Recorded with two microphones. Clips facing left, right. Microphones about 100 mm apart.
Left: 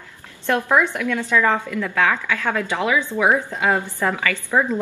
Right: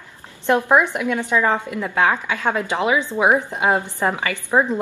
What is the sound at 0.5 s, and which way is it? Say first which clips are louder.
A woman's voice: right 2 dB; 20° right (ahead or behind).